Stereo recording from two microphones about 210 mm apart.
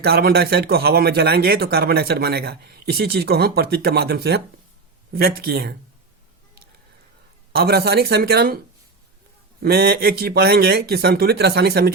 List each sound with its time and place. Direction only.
0.0 s a man's voice: 50° right (ahead or behind)
7.5 s a man's voice: 45° right (ahead or behind)
9.6 s a man's voice: 50° right (ahead or behind)